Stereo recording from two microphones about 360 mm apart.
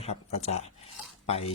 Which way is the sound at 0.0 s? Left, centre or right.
Centre.